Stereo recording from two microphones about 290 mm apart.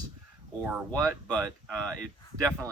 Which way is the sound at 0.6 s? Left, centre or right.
Centre.